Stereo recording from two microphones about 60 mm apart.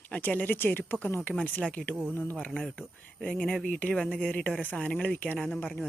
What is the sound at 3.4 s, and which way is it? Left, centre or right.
Speech, centre.